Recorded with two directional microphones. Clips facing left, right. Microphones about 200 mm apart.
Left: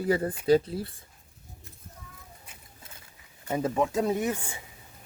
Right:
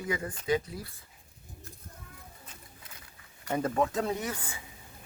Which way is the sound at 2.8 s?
25° left (ahead or behind).